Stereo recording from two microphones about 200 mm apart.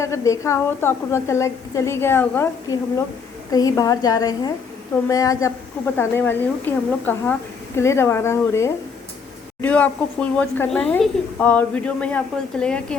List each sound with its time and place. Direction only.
0.0 s a woman's voice: 15° left (ahead or behind)